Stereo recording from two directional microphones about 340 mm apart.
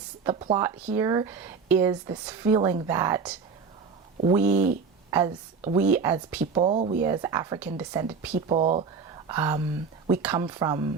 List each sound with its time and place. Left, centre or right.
0.3 s speech: centre
4.5 s speech: right
5.1 s speech: centre